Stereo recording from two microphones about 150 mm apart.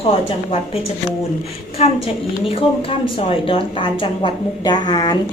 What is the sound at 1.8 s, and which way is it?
A woman's voice, 45° left (ahead or behind).